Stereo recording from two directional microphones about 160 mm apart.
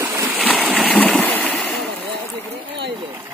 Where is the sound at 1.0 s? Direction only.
10° left (ahead or behind).